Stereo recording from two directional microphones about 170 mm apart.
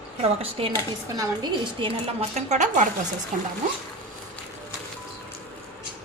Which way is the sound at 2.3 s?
45° right (ahead or behind).